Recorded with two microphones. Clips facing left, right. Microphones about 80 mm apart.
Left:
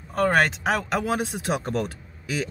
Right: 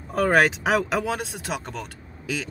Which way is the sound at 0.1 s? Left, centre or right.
Centre.